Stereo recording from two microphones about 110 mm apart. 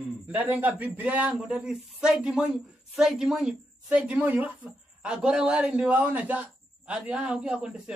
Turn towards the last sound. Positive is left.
turn(degrees=-10)  # may be behind; listen again after turning